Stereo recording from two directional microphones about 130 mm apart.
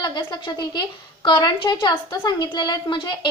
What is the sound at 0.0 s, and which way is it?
A woman's voice, 35° left (ahead or behind).